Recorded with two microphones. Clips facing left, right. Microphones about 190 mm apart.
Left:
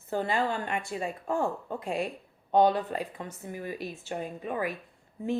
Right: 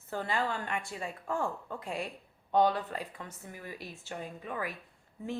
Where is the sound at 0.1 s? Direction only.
20° left (ahead or behind).